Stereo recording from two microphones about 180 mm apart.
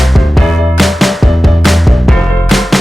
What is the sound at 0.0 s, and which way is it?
Music, centre (ahead or behind).